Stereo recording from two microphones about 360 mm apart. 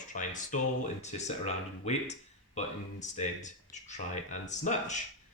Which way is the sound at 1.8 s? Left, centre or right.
Centre.